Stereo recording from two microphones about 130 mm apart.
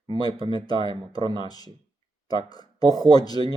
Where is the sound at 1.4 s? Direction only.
30° left (ahead or behind).